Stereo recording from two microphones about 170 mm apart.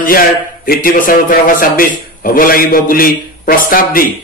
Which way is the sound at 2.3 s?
55° left (ahead or behind).